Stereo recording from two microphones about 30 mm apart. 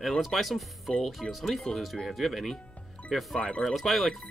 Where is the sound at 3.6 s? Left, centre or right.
Centre.